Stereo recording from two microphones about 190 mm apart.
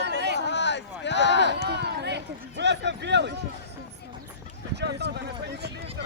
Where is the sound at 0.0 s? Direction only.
65° right (ahead or behind).